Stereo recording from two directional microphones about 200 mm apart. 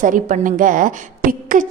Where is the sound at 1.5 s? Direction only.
45° right (ahead or behind).